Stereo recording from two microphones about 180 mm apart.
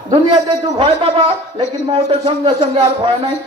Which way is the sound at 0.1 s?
35° right (ahead or behind).